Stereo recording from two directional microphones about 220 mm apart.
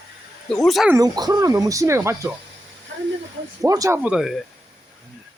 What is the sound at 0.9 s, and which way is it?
Speech, 15° right (ahead or behind).